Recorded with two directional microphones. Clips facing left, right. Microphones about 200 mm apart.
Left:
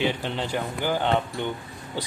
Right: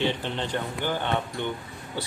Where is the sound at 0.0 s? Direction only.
10° left (ahead or behind).